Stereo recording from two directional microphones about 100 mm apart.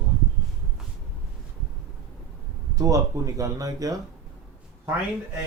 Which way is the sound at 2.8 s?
35° right (ahead or behind).